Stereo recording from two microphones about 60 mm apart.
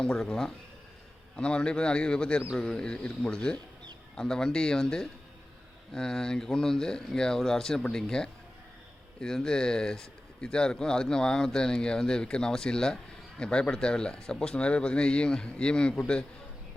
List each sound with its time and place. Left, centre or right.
0.0 s speech: centre